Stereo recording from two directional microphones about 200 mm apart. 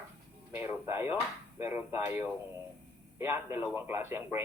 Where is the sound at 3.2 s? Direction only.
10° right (ahead or behind).